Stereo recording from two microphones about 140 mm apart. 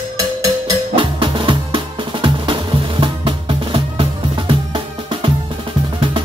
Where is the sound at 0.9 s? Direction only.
35° right (ahead or behind).